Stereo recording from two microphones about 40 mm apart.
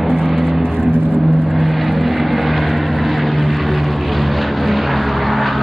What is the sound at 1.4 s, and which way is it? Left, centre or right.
Vehicle, centre.